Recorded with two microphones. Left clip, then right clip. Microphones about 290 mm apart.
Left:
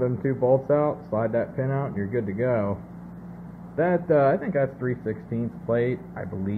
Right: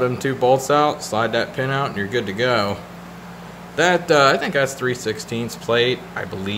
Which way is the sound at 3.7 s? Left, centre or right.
Centre.